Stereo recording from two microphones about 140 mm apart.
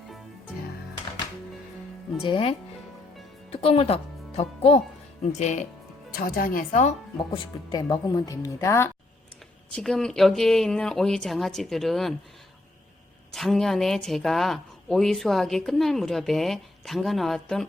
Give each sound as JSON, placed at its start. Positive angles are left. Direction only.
{"t": 2.2, "sound": "speech", "side_deg": 40}
{"t": 5.2, "sound": "speech", "side_deg": 55}
{"t": 6.1, "sound": "speech", "side_deg": 90}
{"t": 7.3, "sound": "a woman's voice", "side_deg": 30}
{"t": 9.7, "sound": "speech", "side_deg": 5}
{"t": 13.3, "sound": "speech", "side_deg": 0}